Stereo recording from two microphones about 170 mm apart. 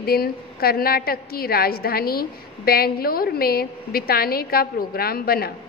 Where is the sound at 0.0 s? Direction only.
65° left (ahead or behind).